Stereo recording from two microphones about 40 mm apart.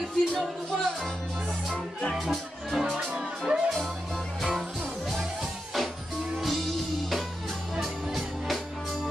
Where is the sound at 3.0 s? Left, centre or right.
Centre.